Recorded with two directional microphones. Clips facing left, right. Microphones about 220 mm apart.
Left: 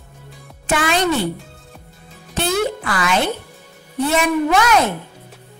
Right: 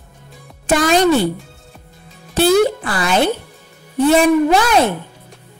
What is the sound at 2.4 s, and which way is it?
Speech, 35° right (ahead or behind).